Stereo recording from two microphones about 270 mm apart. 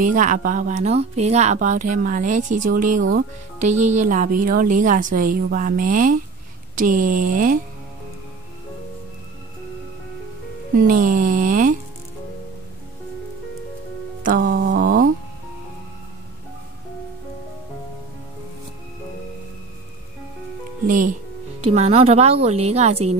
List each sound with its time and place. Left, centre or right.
0.0 s a woman's voice: right
10.7 s a woman's voice: right
14.2 s a sound: right
20.8 s a woman's voice: right